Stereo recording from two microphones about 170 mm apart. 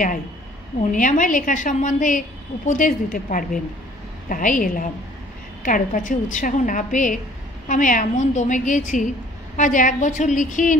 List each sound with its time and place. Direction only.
0.9 s a woman's voice: 50° left (ahead or behind)